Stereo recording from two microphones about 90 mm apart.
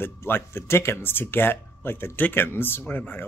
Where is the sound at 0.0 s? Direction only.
25° left (ahead or behind).